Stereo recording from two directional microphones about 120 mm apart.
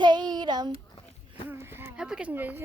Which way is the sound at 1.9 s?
5° right (ahead or behind).